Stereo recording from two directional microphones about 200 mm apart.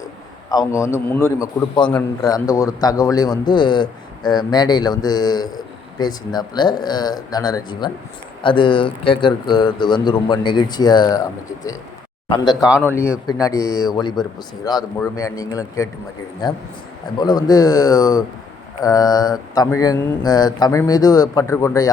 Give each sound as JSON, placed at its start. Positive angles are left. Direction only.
{"t": 0.5, "sound": "a man's voice", "side_deg": 15}
{"t": 12.8, "sound": "speech", "side_deg": 10}
{"t": 17.2, "sound": "a man's voice", "side_deg": 20}